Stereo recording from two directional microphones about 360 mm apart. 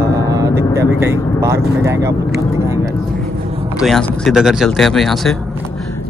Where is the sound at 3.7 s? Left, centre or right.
Centre.